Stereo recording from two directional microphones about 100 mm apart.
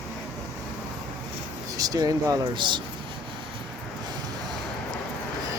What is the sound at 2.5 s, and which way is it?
Speech, 50° right (ahead or behind).